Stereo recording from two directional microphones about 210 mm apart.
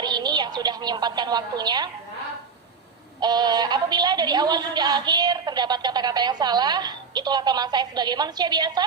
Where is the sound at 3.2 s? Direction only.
20° right (ahead or behind).